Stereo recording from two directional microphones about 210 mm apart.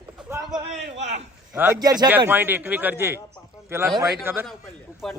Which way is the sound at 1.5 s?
10° right (ahead or behind).